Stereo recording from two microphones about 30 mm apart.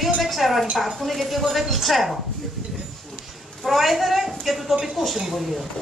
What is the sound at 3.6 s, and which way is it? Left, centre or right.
A woman's voice, centre.